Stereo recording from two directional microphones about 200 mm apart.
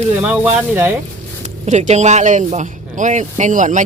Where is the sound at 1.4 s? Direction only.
35° right (ahead or behind).